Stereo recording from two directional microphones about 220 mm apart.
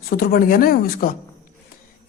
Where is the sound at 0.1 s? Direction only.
45° left (ahead or behind).